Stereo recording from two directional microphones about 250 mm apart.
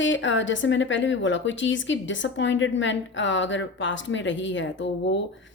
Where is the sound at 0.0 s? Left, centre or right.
Left.